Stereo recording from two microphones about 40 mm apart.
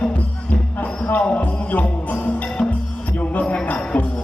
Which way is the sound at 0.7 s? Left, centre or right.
Left.